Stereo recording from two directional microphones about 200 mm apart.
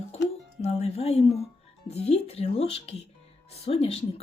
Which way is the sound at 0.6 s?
30° left (ahead or behind).